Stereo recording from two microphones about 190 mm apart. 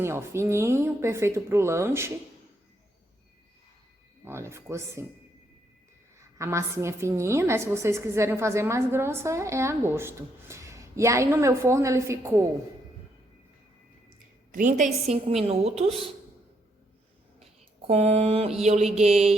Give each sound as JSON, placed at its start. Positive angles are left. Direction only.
{"t": 0.0, "sound": "a woman's voice", "side_deg": -15}
{"t": 4.3, "sound": "a woman's voice", "side_deg": -15}
{"t": 6.1, "sound": "a woman's voice", "side_deg": -15}
{"t": 14.5, "sound": "a woman's voice", "side_deg": -40}
{"t": 17.4, "sound": "mantra", "side_deg": -30}